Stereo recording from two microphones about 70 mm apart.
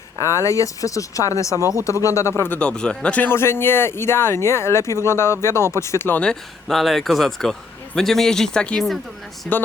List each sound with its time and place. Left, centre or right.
0.2 s speech: left
2.5 s speech: centre
3.2 s speech: left
6.7 s speech: centre